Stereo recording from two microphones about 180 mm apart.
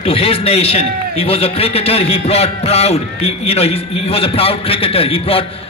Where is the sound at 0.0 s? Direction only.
30° left (ahead or behind).